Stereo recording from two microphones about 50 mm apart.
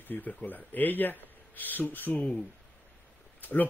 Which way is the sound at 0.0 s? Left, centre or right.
Left.